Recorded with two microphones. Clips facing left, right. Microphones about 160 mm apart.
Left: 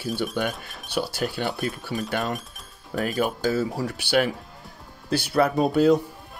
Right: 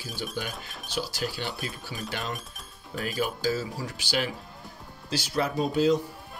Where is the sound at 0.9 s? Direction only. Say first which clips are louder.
Left 5 dB; 60° left (ahead or behind).